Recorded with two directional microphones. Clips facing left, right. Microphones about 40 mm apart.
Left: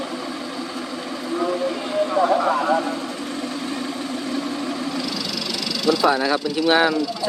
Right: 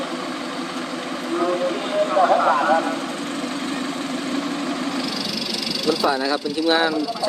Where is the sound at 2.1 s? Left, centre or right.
Right.